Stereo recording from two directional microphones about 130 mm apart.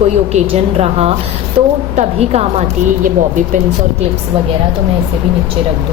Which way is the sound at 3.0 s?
85° right.